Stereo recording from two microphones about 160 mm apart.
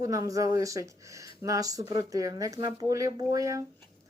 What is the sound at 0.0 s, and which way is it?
Speech, 20° right (ahead or behind).